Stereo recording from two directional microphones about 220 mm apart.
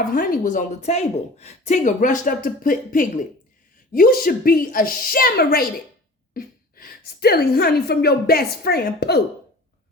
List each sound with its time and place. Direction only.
0.1 s a woman's voice: 40° left (ahead or behind)